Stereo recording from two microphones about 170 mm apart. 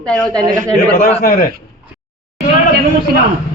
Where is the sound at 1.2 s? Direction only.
60° left (ahead or behind).